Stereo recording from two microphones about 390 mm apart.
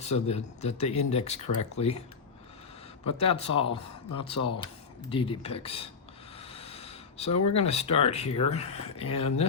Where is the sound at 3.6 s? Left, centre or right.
Centre.